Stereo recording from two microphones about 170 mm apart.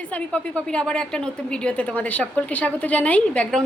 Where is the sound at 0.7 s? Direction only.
5° left (ahead or behind).